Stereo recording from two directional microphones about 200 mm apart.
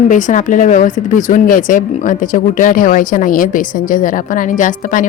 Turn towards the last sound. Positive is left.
turn(degrees=40)  # may be behind; listen again after turning